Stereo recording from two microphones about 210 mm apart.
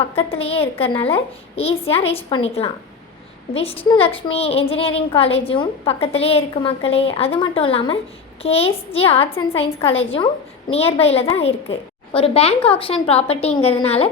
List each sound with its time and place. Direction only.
0.0 s a woman's voice: 25° left (ahead or behind)